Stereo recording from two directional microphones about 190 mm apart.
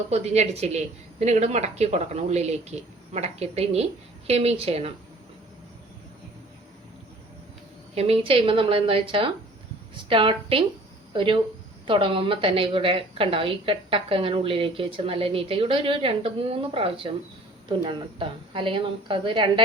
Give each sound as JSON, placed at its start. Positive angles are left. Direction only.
{"t": 0.1, "sound": "speech", "side_deg": -35}
{"t": 7.9, "sound": "a woman's voice", "side_deg": -35}